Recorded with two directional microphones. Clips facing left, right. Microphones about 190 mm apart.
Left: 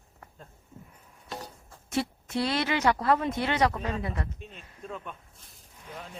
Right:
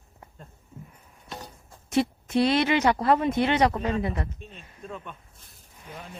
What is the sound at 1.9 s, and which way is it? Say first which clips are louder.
Speech: right 6 dB; 20° right (ahead or behind).